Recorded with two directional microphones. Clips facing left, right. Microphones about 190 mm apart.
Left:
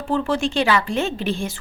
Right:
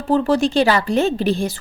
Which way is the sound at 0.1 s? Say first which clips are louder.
Right 5 dB; 40° right (ahead or behind).